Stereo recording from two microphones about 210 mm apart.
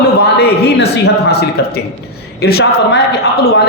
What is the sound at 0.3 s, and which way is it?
A woman's voice, 50° left (ahead or behind).